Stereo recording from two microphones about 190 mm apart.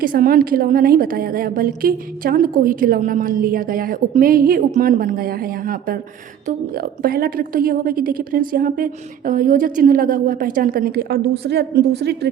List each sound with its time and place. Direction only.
0.0 s a woman's voice: 50° right (ahead or behind)